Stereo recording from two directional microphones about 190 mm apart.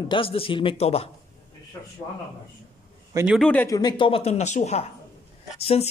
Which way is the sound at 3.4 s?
5° left (ahead or behind).